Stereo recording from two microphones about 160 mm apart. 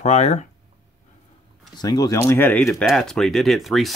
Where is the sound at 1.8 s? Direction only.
25° left (ahead or behind).